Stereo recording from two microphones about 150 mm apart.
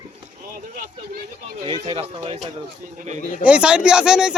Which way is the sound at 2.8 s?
55° right (ahead or behind).